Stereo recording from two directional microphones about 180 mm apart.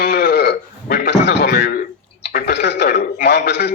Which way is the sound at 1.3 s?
70° left (ahead or behind).